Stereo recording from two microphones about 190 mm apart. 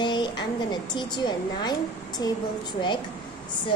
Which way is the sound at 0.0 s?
25° left (ahead or behind).